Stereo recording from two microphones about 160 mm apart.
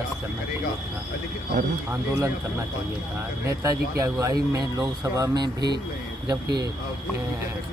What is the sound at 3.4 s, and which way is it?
Speech, 20° right (ahead or behind).